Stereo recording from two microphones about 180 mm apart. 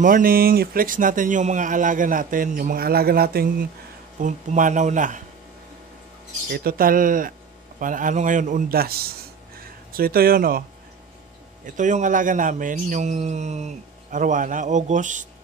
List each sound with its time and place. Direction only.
0.0 s speech: 50° right (ahead or behind)
6.5 s speech: 55° right (ahead or behind)
11.6 s speech: 45° right (ahead or behind)